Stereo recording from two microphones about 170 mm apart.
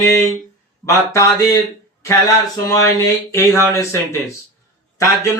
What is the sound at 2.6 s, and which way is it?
Mantra, 20° left (ahead or behind).